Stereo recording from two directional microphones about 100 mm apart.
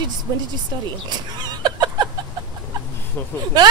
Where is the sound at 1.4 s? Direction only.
45° right (ahead or behind).